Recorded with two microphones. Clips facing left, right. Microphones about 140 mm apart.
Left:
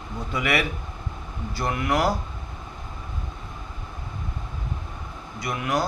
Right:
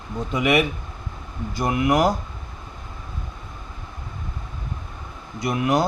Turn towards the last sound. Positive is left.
turn(degrees=-25)  # may be behind; listen again after turning